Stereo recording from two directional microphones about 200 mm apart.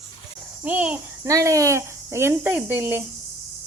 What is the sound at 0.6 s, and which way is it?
A child's voice, 5° right (ahead or behind).